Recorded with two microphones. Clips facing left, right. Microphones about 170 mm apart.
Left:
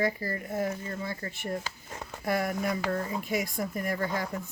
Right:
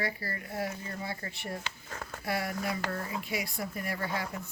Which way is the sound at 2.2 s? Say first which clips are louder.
Left 5 dB; 50° left (ahead or behind).